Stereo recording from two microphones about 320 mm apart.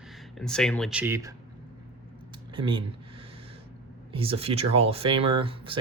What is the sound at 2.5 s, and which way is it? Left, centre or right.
Speech, centre.